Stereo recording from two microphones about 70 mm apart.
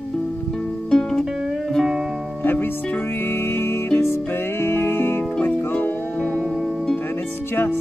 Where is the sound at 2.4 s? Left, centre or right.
Left.